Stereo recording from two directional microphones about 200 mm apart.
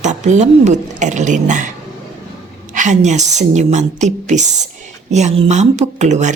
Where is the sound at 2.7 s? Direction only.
40° right (ahead or behind).